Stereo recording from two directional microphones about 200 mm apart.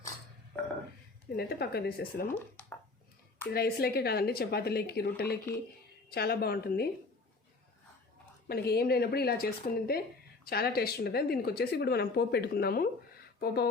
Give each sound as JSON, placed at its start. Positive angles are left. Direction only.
{"t": 1.4, "sound": "speech", "side_deg": 55}
{"t": 2.2, "sound": "speech", "side_deg": 5}
{"t": 3.5, "sound": "speech", "side_deg": 50}
{"t": 8.4, "sound": "speech", "side_deg": 50}